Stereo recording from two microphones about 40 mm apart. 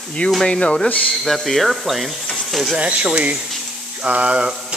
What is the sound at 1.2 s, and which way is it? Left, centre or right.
Speech, centre.